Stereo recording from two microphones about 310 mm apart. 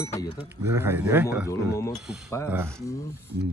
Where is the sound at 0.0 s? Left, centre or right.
Centre.